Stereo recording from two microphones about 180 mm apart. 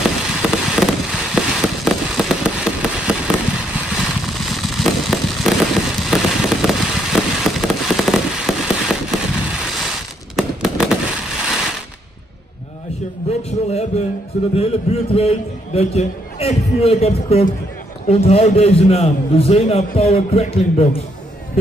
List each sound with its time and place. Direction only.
0.0 s fireworks: 5° right (ahead or behind)
13.3 s a sound: 35° left (ahead or behind)
14.5 s a man's voice: 35° left (ahead or behind)